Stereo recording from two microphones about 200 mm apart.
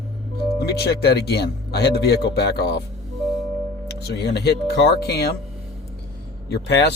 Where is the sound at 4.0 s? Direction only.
55° left (ahead or behind).